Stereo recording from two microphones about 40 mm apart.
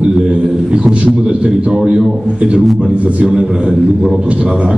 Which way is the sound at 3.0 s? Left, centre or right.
Right.